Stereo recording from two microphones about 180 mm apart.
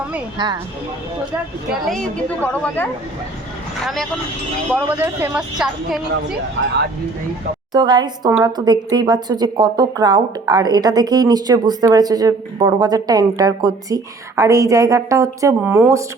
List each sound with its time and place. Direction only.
0.3 s a woman's voice: 25° right (ahead or behind)
1.7 s a woman's voice: centre (ahead or behind)
4.9 s a woman's voice: 10° right (ahead or behind)
6.6 s speech: 75° right (ahead or behind)
7.7 s a woman's voice: 25° right (ahead or behind)